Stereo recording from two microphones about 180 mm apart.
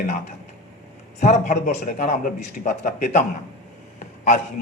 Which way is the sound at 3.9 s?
40° left (ahead or behind).